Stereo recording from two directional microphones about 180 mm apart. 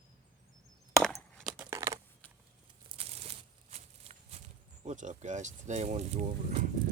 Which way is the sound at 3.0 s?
35° right (ahead or behind).